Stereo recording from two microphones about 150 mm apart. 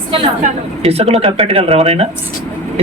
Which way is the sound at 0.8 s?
40° right (ahead or behind).